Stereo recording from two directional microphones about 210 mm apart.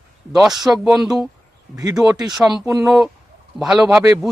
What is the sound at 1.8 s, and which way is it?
Speech, 15° right (ahead or behind).